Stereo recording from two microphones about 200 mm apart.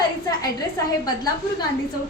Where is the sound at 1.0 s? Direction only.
20° left (ahead or behind).